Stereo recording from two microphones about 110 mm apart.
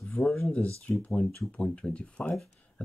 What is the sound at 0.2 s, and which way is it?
Speech, 15° left (ahead or behind).